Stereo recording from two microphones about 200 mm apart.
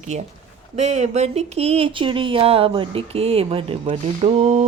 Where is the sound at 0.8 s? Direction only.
35° right (ahead or behind).